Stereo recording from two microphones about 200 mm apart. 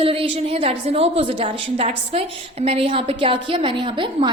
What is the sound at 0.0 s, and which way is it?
A woman's voice, 25° right (ahead or behind).